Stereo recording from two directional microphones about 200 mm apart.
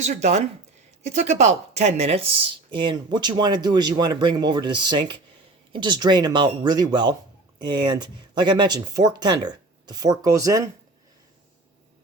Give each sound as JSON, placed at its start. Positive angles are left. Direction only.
{"t": 0.0, "sound": "speech", "side_deg": -35}